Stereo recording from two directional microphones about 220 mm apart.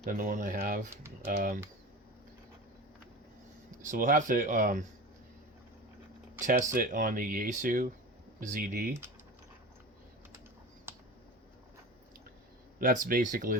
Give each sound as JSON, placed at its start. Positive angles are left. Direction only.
{"t": 0.0, "sound": "speech", "side_deg": -40}
{"t": 3.8, "sound": "speech", "side_deg": -40}
{"t": 6.4, "sound": "speech", "side_deg": -35}
{"t": 10.9, "sound": "computer keyboard", "side_deg": -10}
{"t": 12.8, "sound": "speech", "side_deg": -40}